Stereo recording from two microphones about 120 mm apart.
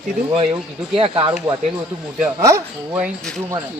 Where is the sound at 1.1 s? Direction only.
35° right (ahead or behind).